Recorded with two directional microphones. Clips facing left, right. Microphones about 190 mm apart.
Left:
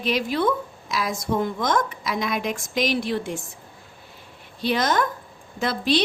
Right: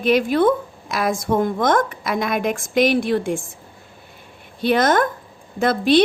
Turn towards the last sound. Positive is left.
turn(degrees=-55)  # may be behind; listen again after turning